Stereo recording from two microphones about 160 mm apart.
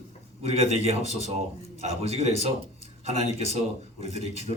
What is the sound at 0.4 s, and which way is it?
Speech, 40° right (ahead or behind).